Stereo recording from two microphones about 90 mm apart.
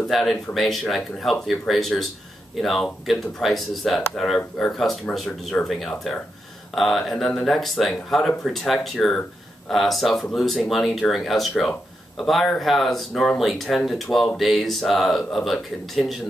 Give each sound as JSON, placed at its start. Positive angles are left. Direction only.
{"t": 0.1, "sound": "speech", "side_deg": 5}